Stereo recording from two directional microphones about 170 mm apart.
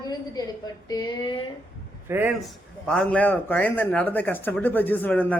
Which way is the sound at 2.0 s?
15° right (ahead or behind).